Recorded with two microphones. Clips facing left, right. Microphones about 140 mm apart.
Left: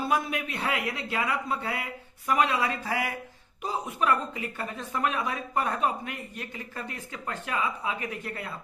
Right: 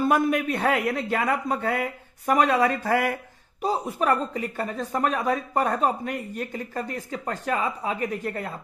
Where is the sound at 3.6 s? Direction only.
35° right (ahead or behind).